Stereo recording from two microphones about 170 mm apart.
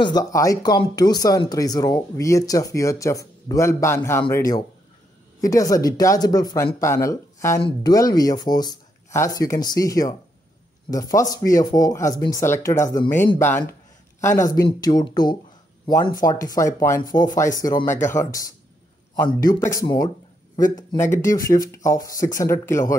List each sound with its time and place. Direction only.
0.0 s speech: 20° left (ahead or behind)